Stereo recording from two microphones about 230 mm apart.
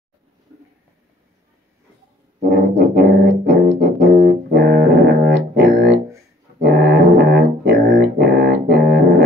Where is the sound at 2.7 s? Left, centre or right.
Right.